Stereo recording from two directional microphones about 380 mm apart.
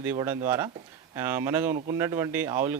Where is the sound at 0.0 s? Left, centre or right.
Centre.